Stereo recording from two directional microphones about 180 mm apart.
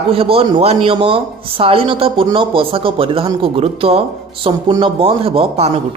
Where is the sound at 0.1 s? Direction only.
30° right (ahead or behind).